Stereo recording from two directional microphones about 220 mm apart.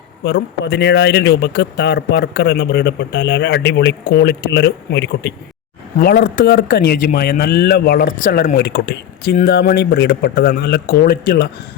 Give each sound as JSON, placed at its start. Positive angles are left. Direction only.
{"t": 0.3, "sound": "speech", "side_deg": 50}